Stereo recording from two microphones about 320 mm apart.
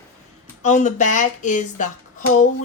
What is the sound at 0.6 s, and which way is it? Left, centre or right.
Speech, left.